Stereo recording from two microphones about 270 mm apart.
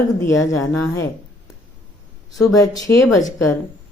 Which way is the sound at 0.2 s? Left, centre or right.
Centre.